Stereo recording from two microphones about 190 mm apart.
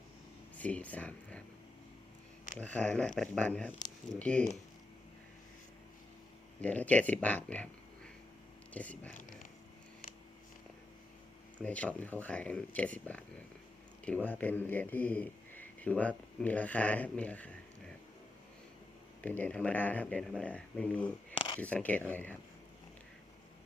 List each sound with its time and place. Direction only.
0.6 s speech: 10° left (ahead or behind)
2.6 s speech: 5° left (ahead or behind)
6.6 s speech: 10° left (ahead or behind)
11.5 s a man's voice: 5° left (ahead or behind)
19.2 s speech: 10° left (ahead or behind)